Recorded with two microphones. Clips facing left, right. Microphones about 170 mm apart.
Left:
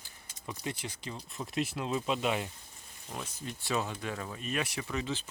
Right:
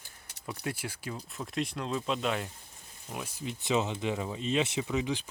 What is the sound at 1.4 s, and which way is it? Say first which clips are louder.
Speech: left 1 dB; 5° left (ahead or behind).